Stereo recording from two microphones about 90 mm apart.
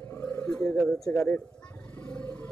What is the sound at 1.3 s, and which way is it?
Roar, 20° left (ahead or behind).